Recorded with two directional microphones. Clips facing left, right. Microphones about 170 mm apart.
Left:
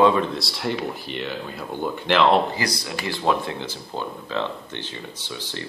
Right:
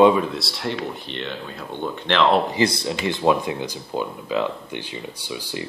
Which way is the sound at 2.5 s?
25° right (ahead or behind).